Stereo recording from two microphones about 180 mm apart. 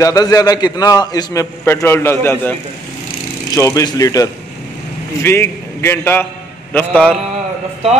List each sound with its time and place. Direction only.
0.0 s a man's voice: 20° left (ahead or behind)
3.5 s a man's voice: 20° left (ahead or behind)